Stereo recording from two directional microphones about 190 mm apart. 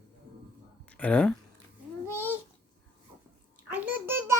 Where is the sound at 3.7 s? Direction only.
10° right (ahead or behind).